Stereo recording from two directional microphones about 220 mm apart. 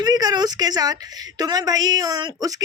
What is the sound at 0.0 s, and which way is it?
A woman's voice, 15° right (ahead or behind).